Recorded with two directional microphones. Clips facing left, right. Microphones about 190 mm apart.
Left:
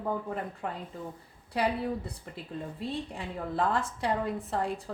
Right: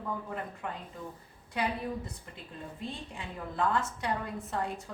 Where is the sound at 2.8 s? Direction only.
30° left (ahead or behind).